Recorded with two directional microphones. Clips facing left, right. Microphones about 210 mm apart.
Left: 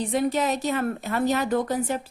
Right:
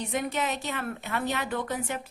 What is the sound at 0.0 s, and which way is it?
A woman's voice, 35° left (ahead or behind).